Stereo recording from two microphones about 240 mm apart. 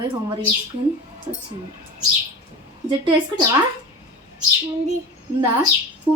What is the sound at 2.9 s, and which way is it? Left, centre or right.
Speech, centre.